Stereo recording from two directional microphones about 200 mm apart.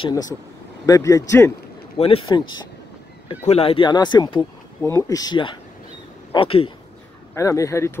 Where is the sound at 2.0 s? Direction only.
30° left (ahead or behind).